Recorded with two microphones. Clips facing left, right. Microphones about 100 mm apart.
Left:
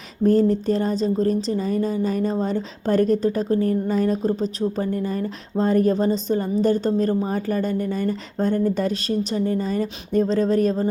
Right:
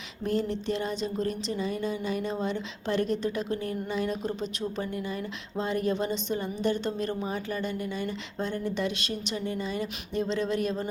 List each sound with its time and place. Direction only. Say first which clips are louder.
0.2 s speech: left 11 dB; 40° left (ahead or behind)